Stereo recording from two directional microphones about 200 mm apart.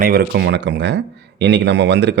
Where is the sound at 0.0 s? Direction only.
50° right (ahead or behind).